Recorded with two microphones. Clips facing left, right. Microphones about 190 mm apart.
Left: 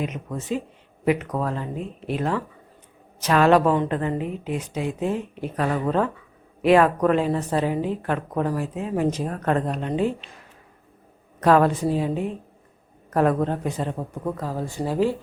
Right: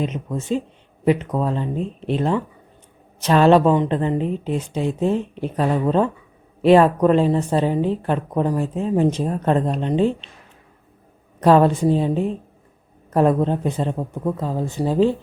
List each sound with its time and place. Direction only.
0.0 s a woman's voice: 25° right (ahead or behind)
11.3 s a woman's voice: 30° right (ahead or behind)